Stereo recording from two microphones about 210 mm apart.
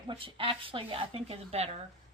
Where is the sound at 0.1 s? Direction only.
25° right (ahead or behind).